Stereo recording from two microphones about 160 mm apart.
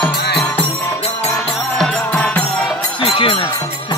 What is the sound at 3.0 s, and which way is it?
Music, 35° left (ahead or behind).